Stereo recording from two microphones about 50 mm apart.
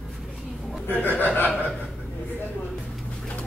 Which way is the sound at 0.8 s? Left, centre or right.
Left.